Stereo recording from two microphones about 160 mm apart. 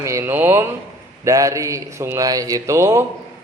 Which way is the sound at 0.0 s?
15° right (ahead or behind).